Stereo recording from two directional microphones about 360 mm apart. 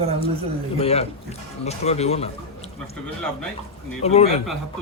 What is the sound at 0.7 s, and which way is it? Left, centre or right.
A man's voice, centre.